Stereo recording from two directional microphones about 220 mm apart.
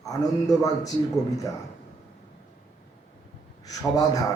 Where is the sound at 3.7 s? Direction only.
15° left (ahead or behind).